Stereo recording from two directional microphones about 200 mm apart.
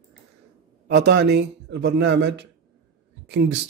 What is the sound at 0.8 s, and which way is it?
Speech, 55° right (ahead or behind).